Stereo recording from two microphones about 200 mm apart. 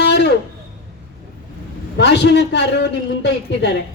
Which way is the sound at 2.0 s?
60° left (ahead or behind).